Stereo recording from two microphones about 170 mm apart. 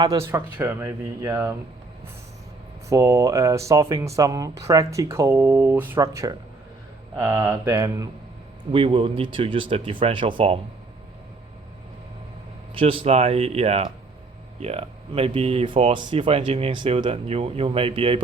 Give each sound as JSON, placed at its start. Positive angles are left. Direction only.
{"t": 0.0, "sound": "speech", "side_deg": -20}
{"t": 2.9, "sound": "speech", "side_deg": -20}
{"t": 8.7, "sound": "speech", "side_deg": -30}
{"t": 12.7, "sound": "speech", "side_deg": -30}